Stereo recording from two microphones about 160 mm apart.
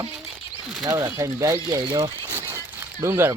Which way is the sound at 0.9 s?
20° right (ahead or behind).